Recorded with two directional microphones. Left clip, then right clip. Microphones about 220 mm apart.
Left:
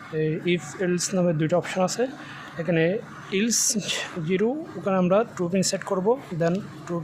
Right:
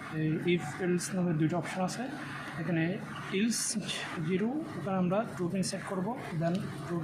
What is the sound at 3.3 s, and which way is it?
Speech, 45° left (ahead or behind).